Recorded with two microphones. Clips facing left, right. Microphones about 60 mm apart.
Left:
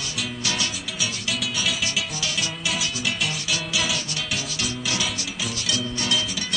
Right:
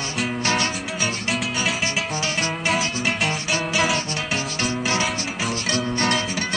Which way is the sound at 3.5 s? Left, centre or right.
Right.